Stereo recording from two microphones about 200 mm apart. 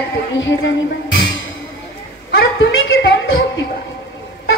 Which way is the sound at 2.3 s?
65° left (ahead or behind).